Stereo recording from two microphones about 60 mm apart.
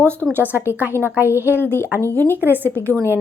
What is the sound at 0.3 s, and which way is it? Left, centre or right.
Speech, right.